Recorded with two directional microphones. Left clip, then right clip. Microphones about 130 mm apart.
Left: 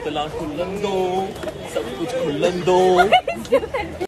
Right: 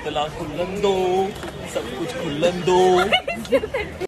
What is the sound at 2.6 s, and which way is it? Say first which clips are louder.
Speech: left 1 dB; 35° left (ahead or behind).